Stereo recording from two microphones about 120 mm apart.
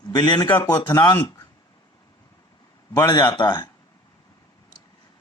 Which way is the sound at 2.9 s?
35° left (ahead or behind).